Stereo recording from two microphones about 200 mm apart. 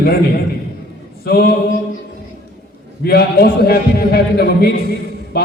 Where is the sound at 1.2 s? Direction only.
50° left (ahead or behind).